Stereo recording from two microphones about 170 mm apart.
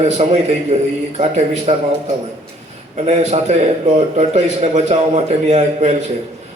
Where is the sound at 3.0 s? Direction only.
40° right (ahead or behind).